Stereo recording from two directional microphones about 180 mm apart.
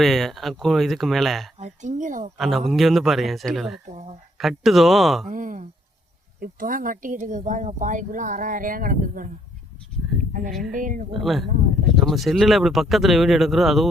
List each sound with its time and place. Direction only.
0.0 s speech: centre (ahead or behind)
1.5 s speech: 40° right (ahead or behind)
2.4 s speech: centre (ahead or behind)
3.8 s speech: 40° right (ahead or behind)
4.4 s speech: centre (ahead or behind)
5.2 s speech: 45° right (ahead or behind)
10.8 s speech: 45° right (ahead or behind)
11.2 s speech: centre (ahead or behind)